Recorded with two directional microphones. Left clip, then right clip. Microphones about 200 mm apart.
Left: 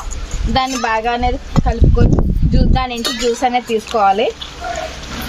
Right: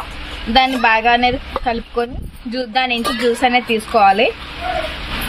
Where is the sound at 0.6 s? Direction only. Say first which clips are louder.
Right 3 dB; 30° left (ahead or behind).